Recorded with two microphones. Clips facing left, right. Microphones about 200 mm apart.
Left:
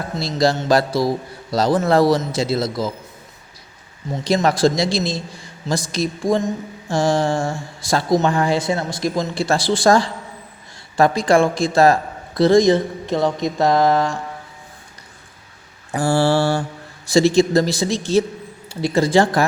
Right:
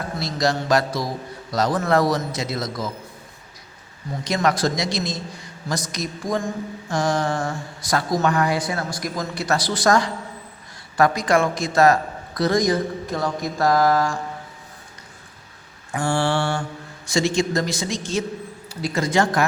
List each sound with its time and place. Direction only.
0.2 s mantra: 30° left (ahead or behind)
4.1 s mantra: 25° left (ahead or behind)
15.9 s a man's voice: 35° left (ahead or behind)